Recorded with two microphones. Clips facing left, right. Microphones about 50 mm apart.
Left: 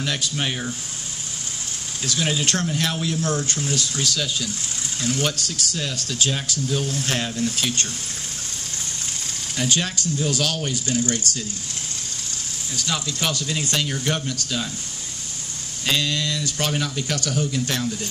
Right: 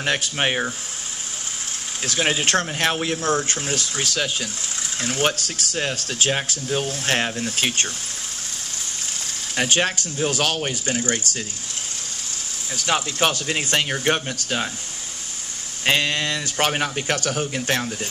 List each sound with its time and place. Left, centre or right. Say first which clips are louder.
0.0 s speech: right 3 dB; right
2.0 s speech: right 2 dB; right
9.6 s speech: right 3 dB; right
12.8 s speech: right 5 dB; right
15.8 s speech: right 3 dB; right